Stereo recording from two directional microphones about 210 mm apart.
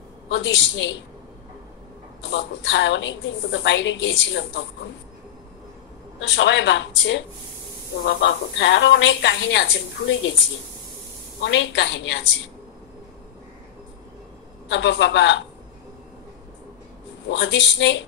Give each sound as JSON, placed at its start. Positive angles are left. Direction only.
{"t": 0.3, "sound": "a woman's voice", "side_deg": 60}
{"t": 2.2, "sound": "a woman's voice", "side_deg": 60}
{"t": 6.2, "sound": "a woman's voice", "side_deg": 60}
{"t": 11.4, "sound": "a woman's voice", "side_deg": 55}
{"t": 14.7, "sound": "a woman's voice", "side_deg": 55}
{"t": 17.3, "sound": "a woman's voice", "side_deg": 60}